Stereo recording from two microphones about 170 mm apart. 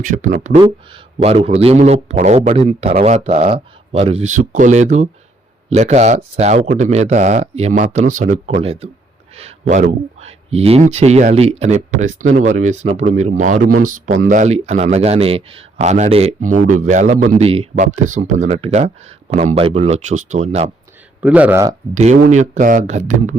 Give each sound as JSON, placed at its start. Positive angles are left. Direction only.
{"t": 0.0, "sound": "speech", "side_deg": -50}
{"t": 0.6, "sound": "speech", "side_deg": -35}
{"t": 8.6, "sound": "speech", "side_deg": -35}
{"t": 17.7, "sound": "speech", "side_deg": -45}
{"t": 21.2, "sound": "speech", "side_deg": -10}
{"t": 21.9, "sound": "speech", "side_deg": -45}